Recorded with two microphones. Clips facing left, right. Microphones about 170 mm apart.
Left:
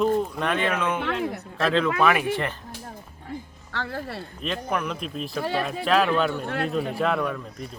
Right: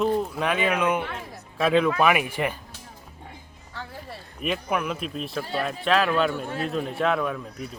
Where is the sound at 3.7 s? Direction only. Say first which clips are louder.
Left 7 dB; 75° left (ahead or behind).